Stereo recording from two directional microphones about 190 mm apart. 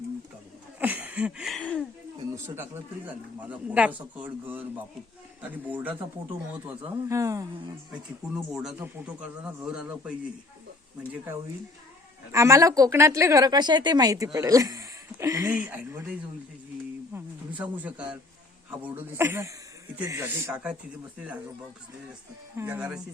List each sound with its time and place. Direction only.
0.8 s a sound: 10° right (ahead or behind)
2.1 s a woman's voice: 15° right (ahead or behind)
8.5 s speech: 5° right (ahead or behind)
12.3 s a woman's voice: 15° right (ahead or behind)
17.2 s a sound: 10° right (ahead or behind)
18.7 s a woman's voice: 10° right (ahead or behind)
22.5 s a woman's voice: 10° right (ahead or behind)